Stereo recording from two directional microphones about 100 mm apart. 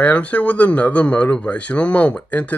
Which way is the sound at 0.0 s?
15° left (ahead or behind).